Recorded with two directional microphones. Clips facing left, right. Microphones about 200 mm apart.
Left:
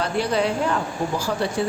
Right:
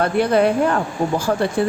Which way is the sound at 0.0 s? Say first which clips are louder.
Right 6 dB; 55° right (ahead or behind).